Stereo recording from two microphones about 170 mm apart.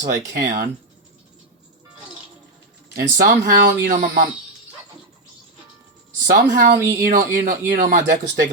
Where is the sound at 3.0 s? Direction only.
60° right (ahead or behind).